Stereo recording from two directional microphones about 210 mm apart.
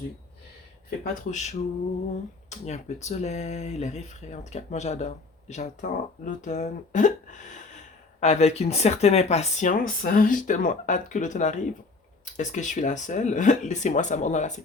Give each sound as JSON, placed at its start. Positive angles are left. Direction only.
{"t": 1.0, "sound": "speech", "side_deg": 35}